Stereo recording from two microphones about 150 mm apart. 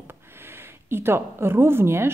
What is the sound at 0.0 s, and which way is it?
Speech, 15° right (ahead or behind).